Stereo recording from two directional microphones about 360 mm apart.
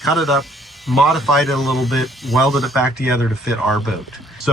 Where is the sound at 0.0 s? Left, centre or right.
Centre.